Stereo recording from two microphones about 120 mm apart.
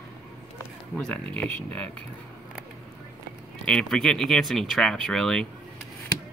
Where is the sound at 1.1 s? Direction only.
10° left (ahead or behind).